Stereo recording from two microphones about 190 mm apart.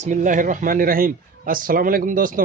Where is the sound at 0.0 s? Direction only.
40° right (ahead or behind).